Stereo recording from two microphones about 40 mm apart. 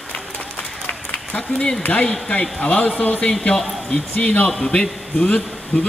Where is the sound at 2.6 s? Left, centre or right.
Left.